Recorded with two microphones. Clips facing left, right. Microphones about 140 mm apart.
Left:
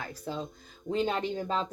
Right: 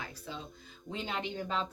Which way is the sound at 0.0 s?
45° left (ahead or behind).